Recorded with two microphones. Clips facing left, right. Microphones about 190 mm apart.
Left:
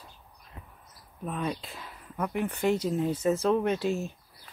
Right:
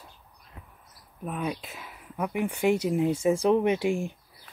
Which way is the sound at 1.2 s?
5° right (ahead or behind).